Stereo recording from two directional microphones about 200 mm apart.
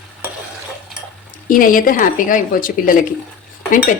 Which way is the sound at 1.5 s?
45° left (ahead or behind).